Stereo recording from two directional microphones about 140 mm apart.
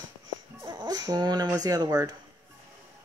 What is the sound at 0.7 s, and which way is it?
Speech, 30° right (ahead or behind).